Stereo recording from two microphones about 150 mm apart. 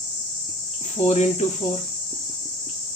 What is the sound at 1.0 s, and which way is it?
Speech, 45° left (ahead or behind).